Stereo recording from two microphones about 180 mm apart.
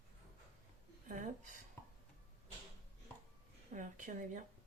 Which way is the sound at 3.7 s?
45° right (ahead or behind).